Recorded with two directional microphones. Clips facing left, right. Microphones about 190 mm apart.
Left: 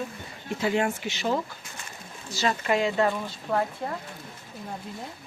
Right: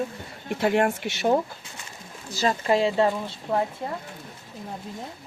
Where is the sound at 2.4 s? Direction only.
30° right (ahead or behind).